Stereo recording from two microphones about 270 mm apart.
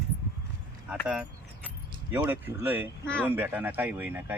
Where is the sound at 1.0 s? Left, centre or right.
Centre.